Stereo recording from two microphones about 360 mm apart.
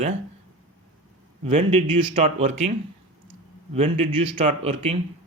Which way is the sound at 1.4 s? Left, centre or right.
Centre.